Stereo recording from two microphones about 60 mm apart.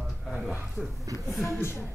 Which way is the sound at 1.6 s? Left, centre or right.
Left.